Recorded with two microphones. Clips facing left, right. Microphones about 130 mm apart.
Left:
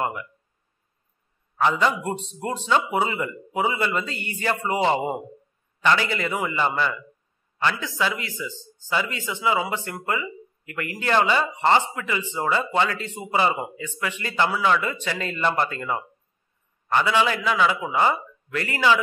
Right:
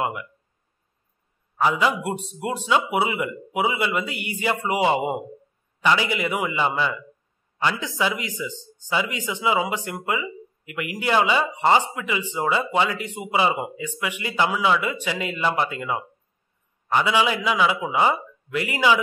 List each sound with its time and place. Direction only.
0.0 s speech: 10° right (ahead or behind)
1.6 s speech: 5° right (ahead or behind)